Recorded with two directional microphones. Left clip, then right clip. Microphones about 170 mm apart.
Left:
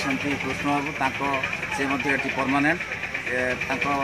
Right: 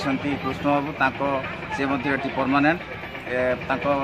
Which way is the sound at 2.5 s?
20° right (ahead or behind).